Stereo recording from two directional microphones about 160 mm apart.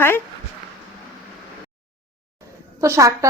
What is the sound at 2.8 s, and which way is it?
Speech, 20° right (ahead or behind).